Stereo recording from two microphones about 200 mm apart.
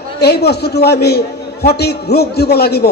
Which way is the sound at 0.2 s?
55° left (ahead or behind).